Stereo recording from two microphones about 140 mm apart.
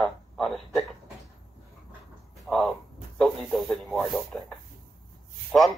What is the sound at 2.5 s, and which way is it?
Speech, centre (ahead or behind).